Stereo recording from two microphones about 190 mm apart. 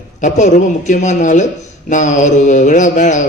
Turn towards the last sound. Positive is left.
turn(degrees=40)  # may be behind; listen again after turning